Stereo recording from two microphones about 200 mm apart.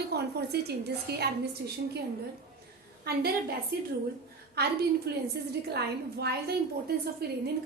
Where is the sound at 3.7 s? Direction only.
50° right (ahead or behind).